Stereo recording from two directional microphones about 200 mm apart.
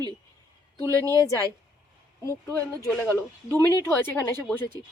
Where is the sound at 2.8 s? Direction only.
5° left (ahead or behind).